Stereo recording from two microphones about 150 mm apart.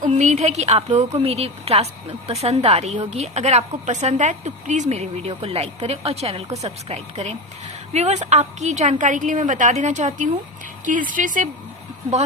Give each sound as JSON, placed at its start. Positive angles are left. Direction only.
{"t": 0.0, "sound": "a woman's voice", "side_deg": -55}